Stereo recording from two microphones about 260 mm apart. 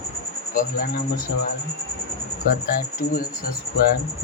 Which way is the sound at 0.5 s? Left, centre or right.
Left.